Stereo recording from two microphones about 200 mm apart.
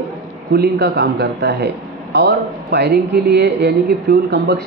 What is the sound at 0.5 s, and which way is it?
A man's voice, 55° right (ahead or behind).